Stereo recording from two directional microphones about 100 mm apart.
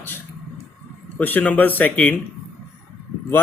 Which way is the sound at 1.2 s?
15° left (ahead or behind).